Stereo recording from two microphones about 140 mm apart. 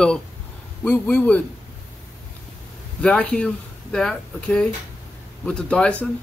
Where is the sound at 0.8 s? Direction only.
10° left (ahead or behind).